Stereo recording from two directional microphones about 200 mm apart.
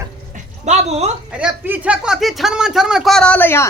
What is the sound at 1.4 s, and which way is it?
A man's voice, 5° right (ahead or behind).